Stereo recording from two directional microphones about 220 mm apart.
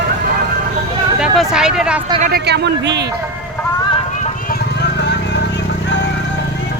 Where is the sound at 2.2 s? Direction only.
45° right (ahead or behind).